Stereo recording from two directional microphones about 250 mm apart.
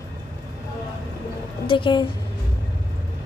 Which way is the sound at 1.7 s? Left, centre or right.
Centre.